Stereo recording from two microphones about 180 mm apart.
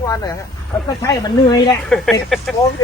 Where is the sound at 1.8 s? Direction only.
5° left (ahead or behind).